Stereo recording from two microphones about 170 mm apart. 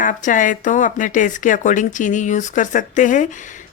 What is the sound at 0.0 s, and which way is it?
Speech, 50° left (ahead or behind).